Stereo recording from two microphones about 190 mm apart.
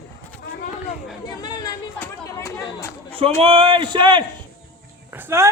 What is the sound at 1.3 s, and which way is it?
Chatter, 20° left (ahead or behind).